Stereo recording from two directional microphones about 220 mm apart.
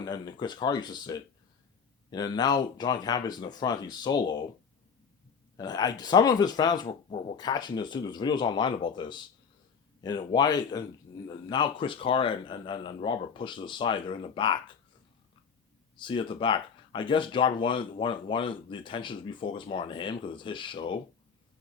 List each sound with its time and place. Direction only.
0.0 s speech: 20° left (ahead or behind)
5.5 s speech: 20° left (ahead or behind)
16.0 s speech: 20° left (ahead or behind)